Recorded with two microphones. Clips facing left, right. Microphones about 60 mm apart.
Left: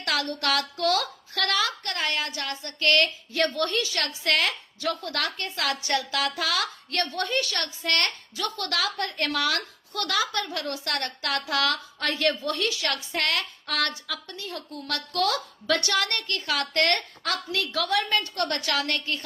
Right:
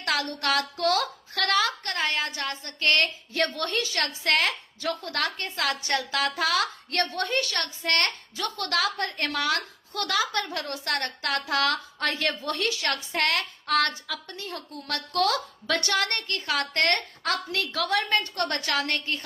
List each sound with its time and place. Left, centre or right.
0.0 s a woman's voice: right
14.3 s a woman's voice: right